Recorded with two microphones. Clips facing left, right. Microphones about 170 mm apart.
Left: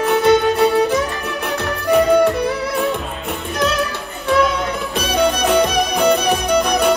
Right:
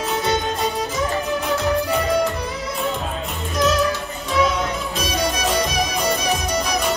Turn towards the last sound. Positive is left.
turn(degrees=60)  # may be behind; listen again after turning